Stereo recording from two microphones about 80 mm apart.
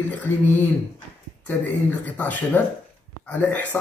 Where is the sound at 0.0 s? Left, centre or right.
Left.